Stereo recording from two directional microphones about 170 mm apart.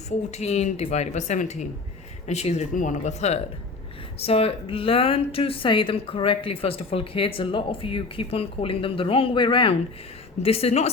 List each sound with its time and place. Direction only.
0.3 s a woman's voice: 40° left (ahead or behind)